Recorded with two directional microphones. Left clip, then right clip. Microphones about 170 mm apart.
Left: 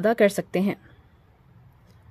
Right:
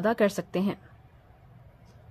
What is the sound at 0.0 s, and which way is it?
Speech, 25° left (ahead or behind).